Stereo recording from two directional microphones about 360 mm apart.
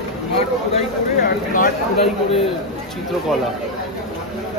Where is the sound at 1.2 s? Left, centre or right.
Left.